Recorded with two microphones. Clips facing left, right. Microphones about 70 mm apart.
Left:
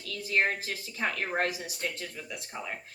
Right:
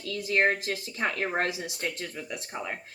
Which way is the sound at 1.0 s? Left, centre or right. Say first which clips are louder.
Right 3 dB; right.